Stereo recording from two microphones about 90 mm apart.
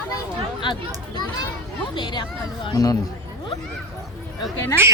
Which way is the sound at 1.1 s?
50° left (ahead or behind).